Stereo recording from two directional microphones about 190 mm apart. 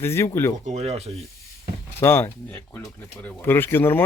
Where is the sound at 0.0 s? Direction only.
15° left (ahead or behind).